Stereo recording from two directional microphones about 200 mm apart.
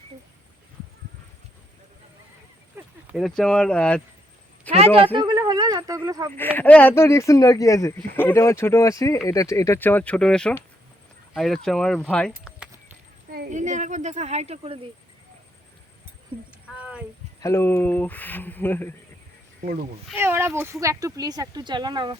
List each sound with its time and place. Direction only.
2.8 s a sound: 10° right (ahead or behind)
3.2 s speech: centre (ahead or behind)
4.7 s a sound: 5° left (ahead or behind)
5.1 s speech: 20° right (ahead or behind)
6.3 s speech: 10° left (ahead or behind)
13.5 s speech: 35° right (ahead or behind)
16.3 s speech: 25° right (ahead or behind)
16.7 s a sound: 5° right (ahead or behind)
17.4 s speech: 15° left (ahead or behind)
20.1 s speech: 10° right (ahead or behind)